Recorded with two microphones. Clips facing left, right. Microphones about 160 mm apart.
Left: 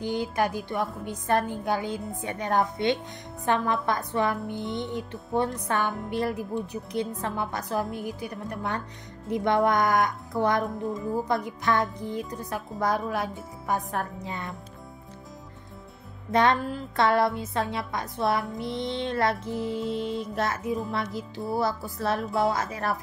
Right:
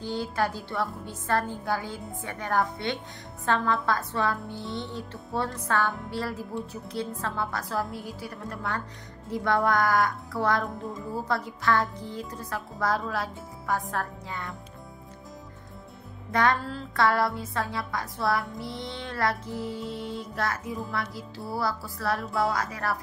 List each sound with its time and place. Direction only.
0.0 s a woman's voice: 15° left (ahead or behind)
16.3 s speech: 20° left (ahead or behind)